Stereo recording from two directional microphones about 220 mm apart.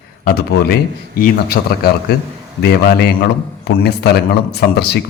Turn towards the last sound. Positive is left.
turn(degrees=45)  # may be behind; listen again after turning